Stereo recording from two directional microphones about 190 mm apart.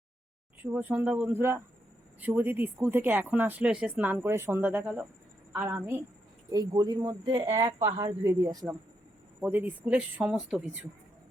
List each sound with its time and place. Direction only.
0.6 s speech: 10° right (ahead or behind)